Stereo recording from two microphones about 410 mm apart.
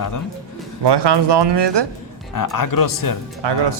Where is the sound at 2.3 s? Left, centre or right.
Left.